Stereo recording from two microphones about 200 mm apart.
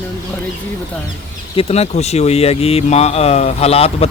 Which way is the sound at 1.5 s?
30° left (ahead or behind).